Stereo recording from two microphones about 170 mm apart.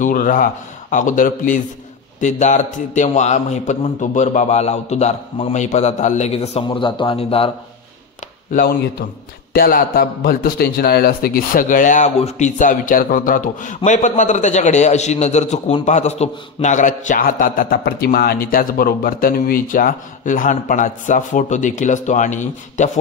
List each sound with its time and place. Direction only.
0.0 s a man's voice: 55° left (ahead or behind); by 7.5 s 35° left (ahead or behind)
9.5 s a man's voice: 60° left (ahead or behind)